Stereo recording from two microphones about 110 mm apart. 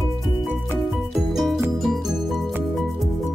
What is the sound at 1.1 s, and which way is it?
Music, centre (ahead or behind).